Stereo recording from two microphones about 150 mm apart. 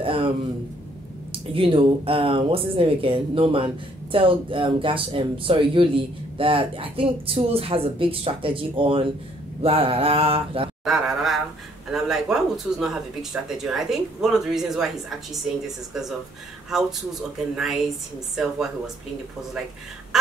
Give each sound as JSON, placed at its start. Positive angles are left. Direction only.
{"t": 0.0, "sound": "a sound", "side_deg": -35}
{"t": 1.3, "sound": "speech", "side_deg": -35}
{"t": 10.8, "sound": "speech", "side_deg": -5}